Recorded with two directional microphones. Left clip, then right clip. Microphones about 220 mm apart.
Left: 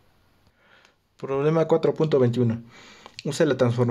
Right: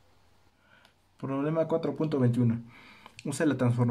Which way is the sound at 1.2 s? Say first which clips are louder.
Left 7 dB; 40° left (ahead or behind).